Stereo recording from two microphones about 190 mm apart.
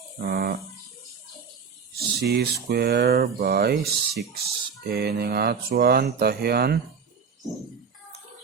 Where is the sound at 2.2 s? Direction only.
55° right (ahead or behind).